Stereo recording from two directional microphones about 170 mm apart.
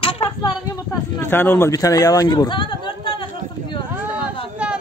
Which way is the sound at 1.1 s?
10° left (ahead or behind).